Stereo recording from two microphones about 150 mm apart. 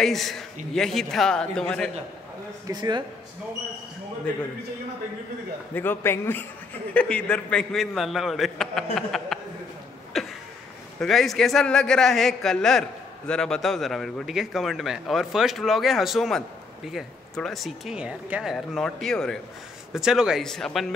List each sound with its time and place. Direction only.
0.0 s speech: centre (ahead or behind)
2.6 s speech: 25° right (ahead or behind)
5.8 s a man's voice: 15° left (ahead or behind)
10.1 s a sound: centre (ahead or behind)
11.0 s speech: centre (ahead or behind)